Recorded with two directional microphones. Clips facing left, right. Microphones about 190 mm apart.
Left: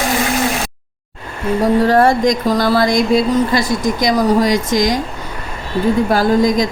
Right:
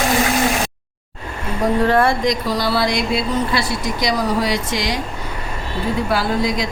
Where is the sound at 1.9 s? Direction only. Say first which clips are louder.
Left 4 dB; 40° left (ahead or behind).